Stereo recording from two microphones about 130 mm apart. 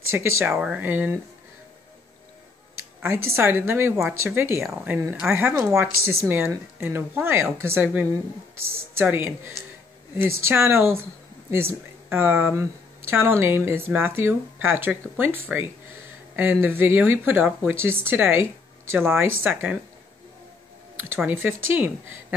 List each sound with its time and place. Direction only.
0.1 s a woman's voice: 20° right (ahead or behind)
3.0 s a woman's voice: 20° right (ahead or behind)
16.6 s speech: 15° right (ahead or behind)
21.2 s speech: 15° right (ahead or behind)